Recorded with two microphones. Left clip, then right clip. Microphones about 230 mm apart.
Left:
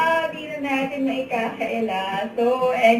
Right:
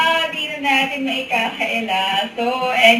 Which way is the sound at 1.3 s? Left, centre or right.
Right.